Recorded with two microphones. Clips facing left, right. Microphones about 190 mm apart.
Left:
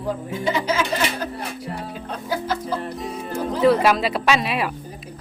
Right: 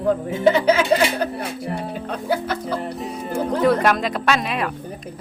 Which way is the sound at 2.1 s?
60° right (ahead or behind).